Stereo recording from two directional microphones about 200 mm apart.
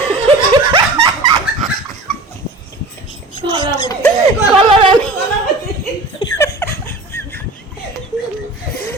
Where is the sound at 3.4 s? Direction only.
25° right (ahead or behind).